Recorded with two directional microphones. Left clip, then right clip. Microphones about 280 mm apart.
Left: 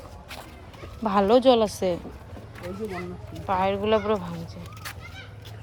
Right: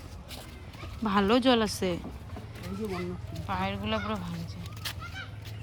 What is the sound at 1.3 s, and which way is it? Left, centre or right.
Speech, centre.